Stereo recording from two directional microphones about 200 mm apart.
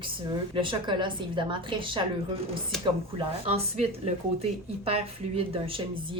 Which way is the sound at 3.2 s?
30° right (ahead or behind).